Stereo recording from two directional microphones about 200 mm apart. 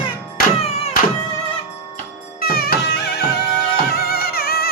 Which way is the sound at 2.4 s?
50° left (ahead or behind).